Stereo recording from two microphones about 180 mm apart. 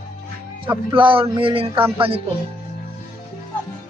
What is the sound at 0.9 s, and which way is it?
Speech, 30° right (ahead or behind).